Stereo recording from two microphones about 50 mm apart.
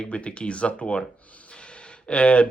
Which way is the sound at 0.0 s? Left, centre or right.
Left.